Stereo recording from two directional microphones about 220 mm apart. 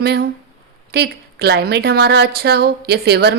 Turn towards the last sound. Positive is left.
turn(degrees=-45)  # may be behind; listen again after turning